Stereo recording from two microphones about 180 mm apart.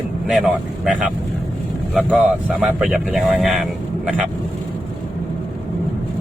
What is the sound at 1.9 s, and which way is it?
Speech, 5° right (ahead or behind).